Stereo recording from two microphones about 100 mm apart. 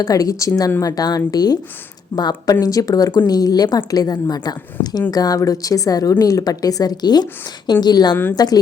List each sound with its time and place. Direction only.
0.0 s a woman's voice: 35° left (ahead or behind)
8.1 s a woman's voice: 20° left (ahead or behind)